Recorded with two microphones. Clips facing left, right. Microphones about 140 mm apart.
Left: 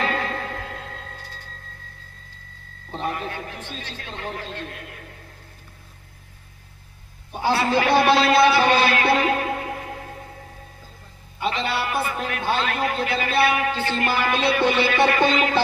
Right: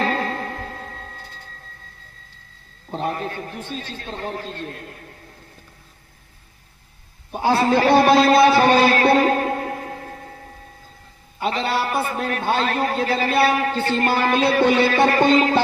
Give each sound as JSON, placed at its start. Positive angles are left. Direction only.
{"t": 0.0, "sound": "music", "side_deg": -35}
{"t": 2.9, "sound": "a man's voice", "side_deg": -40}
{"t": 7.3, "sound": "a man's voice", "side_deg": -40}
{"t": 11.3, "sound": "a man's voice", "side_deg": -40}